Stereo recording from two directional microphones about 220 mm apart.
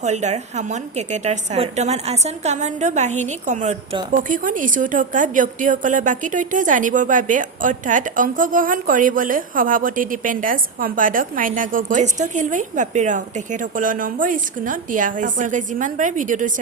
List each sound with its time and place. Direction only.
0.0 s a woman's voice: 30° right (ahead or behind)